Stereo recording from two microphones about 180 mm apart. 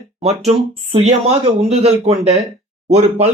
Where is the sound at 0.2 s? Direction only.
35° right (ahead or behind).